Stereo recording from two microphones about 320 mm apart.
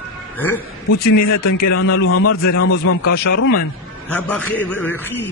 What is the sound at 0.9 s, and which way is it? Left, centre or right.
A man's voice, left.